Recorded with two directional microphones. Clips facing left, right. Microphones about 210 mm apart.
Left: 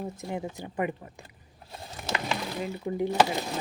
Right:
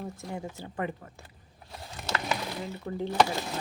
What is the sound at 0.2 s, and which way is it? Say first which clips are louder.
Speech: left 3 dB; 20° left (ahead or behind).